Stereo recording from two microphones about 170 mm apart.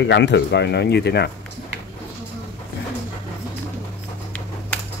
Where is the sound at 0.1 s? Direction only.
90° left; by 1.3 s 75° left (ahead or behind).